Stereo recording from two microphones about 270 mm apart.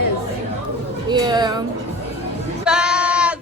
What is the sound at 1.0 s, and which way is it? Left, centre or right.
Speech, centre.